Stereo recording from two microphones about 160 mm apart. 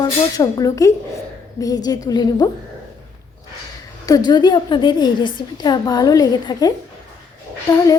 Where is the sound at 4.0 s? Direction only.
25° left (ahead or behind).